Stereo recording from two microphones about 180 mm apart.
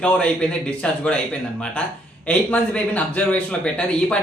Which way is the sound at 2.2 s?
10° left (ahead or behind).